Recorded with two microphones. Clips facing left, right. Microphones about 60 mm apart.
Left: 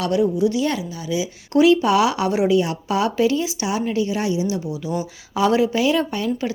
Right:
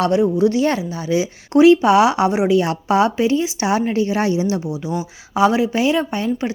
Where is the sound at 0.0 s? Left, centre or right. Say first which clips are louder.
Right 3 dB; right.